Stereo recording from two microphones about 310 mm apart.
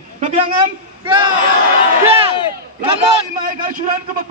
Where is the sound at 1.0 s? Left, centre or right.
Centre.